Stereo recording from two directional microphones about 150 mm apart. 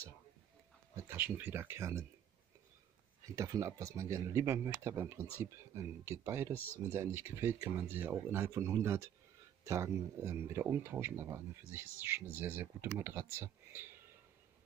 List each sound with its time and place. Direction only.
0.9 s speech: 15° right (ahead or behind)
3.3 s speech: 20° right (ahead or behind)